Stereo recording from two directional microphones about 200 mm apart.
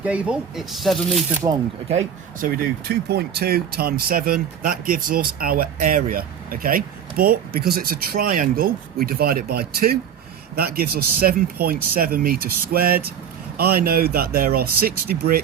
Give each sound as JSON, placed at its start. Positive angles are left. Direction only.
{"t": 0.0, "sound": "speech", "side_deg": -5}
{"t": 1.4, "sound": "speech", "side_deg": -25}
{"t": 2.4, "sound": "speech", "side_deg": -50}